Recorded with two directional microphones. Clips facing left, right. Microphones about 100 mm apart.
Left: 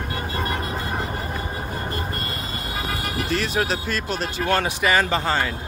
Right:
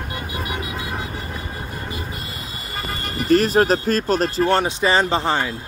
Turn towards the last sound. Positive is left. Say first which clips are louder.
# right 2 dB
turn(degrees=-15)  # may be behind; listen again after turning